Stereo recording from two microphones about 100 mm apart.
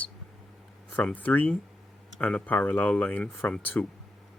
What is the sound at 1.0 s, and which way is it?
Speech, 15° left (ahead or behind).